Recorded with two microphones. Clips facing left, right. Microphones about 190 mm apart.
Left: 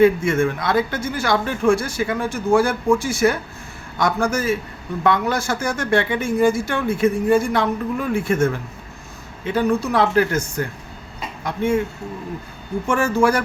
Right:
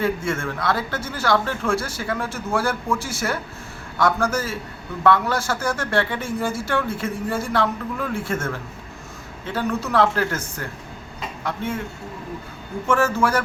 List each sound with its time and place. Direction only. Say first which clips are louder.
0.0 s speech: left 8 dB; 15° left (ahead or behind)
9.5 s speech: left 5 dB; 15° left (ahead or behind)
11.4 s speech: left 7 dB; 15° left (ahead or behind)
12.9 s speech: left 2 dB; 15° left (ahead or behind)